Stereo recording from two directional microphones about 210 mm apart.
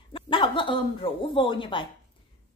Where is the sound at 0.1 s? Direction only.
25° left (ahead or behind).